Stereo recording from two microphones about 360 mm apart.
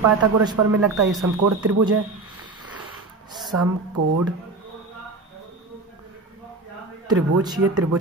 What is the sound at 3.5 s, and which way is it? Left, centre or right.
Speech, right.